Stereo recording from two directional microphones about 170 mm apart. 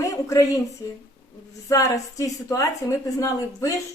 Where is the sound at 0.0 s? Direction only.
20° left (ahead or behind).